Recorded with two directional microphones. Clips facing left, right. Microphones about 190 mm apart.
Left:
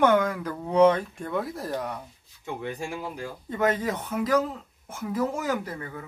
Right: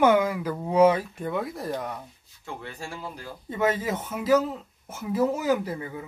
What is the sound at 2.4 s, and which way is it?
Speech, 15° left (ahead or behind).